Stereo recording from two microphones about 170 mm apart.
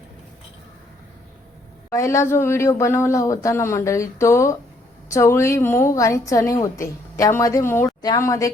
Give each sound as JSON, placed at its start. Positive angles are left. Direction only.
{"t": 1.9, "sound": "a woman's voice", "side_deg": 15}